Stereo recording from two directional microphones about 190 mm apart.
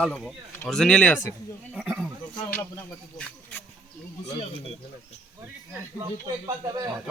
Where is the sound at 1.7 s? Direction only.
5° right (ahead or behind).